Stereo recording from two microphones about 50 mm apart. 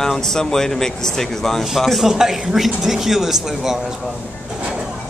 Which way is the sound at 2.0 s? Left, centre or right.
Centre.